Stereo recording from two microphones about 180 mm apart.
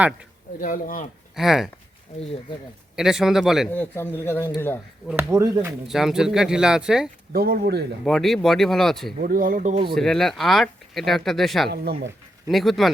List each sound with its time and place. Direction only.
0.6 s speech: 50° left (ahead or behind)
1.4 s speech: centre (ahead or behind)
2.9 s speech: centre (ahead or behind)
3.7 s a man's voice: 10° left (ahead or behind)
5.0 s speech: 15° right (ahead or behind)
5.9 s speech: centre (ahead or behind)
7.3 s speech: 55° right (ahead or behind)
8.0 s speech: centre (ahead or behind)
9.2 s speech: 50° right (ahead or behind)
9.9 s speech: centre (ahead or behind)